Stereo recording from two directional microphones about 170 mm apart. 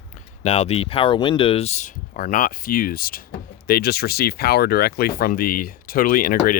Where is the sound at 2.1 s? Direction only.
55° left (ahead or behind).